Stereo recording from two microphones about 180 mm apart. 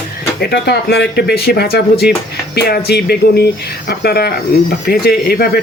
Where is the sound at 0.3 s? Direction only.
65° left (ahead or behind).